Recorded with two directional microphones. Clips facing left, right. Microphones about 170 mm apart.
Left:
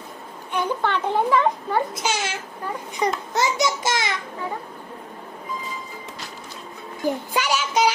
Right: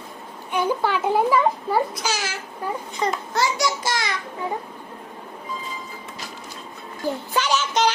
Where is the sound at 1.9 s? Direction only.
25° left (ahead or behind).